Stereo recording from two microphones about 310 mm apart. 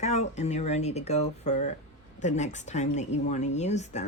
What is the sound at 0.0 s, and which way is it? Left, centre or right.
Speech, left.